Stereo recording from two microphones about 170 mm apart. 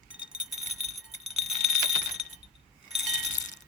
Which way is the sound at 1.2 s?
Centre (ahead or behind).